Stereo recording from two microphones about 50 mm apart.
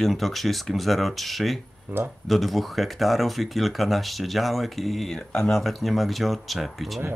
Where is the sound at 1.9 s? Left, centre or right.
Right.